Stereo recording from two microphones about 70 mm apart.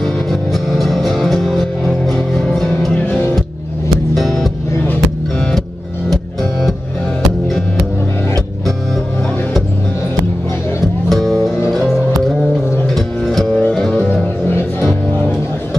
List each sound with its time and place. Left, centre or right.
0.0 s music: centre
2.9 s music: centre
4.1 s music: centre
11.1 s music: centre
12.9 s music: centre